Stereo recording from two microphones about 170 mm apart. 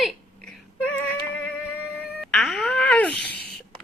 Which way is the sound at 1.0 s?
5° left (ahead or behind).